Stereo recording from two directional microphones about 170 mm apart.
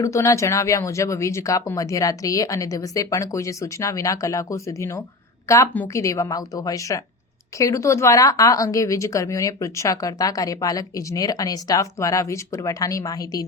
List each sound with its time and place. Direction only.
0.0 s speech: 20° left (ahead or behind)